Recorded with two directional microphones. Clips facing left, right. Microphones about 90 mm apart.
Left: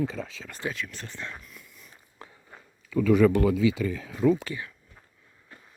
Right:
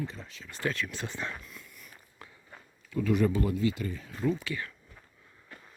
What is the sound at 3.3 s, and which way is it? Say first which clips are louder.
Speech: left 6 dB; 90° left.